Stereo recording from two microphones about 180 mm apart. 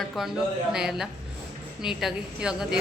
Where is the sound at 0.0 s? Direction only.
Centre (ahead or behind).